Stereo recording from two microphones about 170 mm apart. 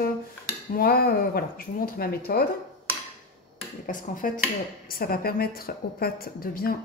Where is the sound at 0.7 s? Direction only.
65° left (ahead or behind).